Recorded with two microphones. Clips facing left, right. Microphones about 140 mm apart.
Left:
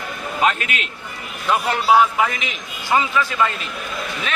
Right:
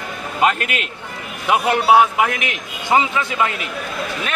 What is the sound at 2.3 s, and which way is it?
Speech, 65° right (ahead or behind).